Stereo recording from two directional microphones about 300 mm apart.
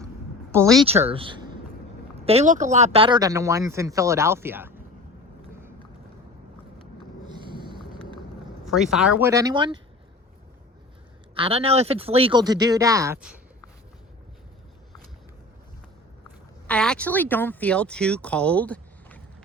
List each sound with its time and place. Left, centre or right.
0.9 s speech: centre
7.3 s a sound: centre
8.6 s speech: centre
11.3 s speech: centre
16.6 s speech: centre